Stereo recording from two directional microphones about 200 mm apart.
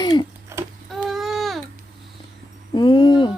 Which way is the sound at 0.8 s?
Centre (ahead or behind).